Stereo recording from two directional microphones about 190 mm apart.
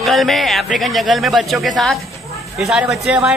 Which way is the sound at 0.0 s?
Centre (ahead or behind).